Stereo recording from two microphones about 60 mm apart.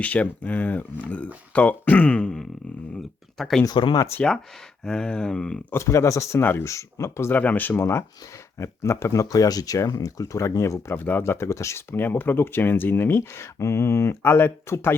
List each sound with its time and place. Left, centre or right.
0.0 s speech: left
2.2 s speech: centre
3.6 s speech: left
4.8 s speech: centre
5.7 s speech: left
6.4 s speech: left
6.7 s speech: left
7.3 s speech: left
8.5 s speech: left
9.3 s speech: left
10.9 s speech: left
11.9 s speech: left